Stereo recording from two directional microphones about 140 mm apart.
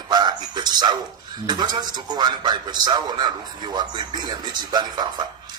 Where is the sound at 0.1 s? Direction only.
30° right (ahead or behind).